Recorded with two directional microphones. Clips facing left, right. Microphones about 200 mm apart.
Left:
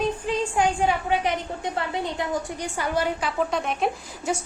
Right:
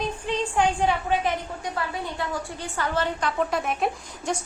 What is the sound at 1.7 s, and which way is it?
A woman's voice, 20° left (ahead or behind).